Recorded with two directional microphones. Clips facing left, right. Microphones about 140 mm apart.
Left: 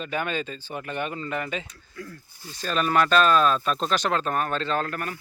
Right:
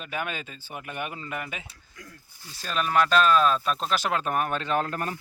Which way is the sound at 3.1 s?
5° right (ahead or behind).